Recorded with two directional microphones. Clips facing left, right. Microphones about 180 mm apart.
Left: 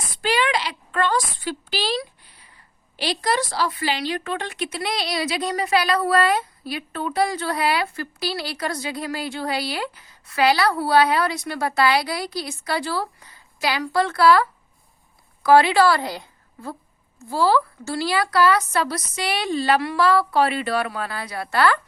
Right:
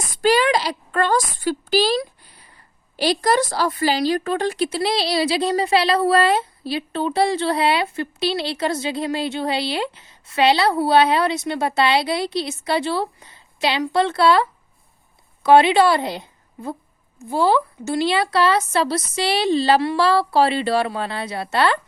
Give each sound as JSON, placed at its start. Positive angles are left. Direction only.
{"t": 0.2, "sound": "a woman's voice", "side_deg": -40}
{"t": 15.4, "sound": "a woman's voice", "side_deg": -20}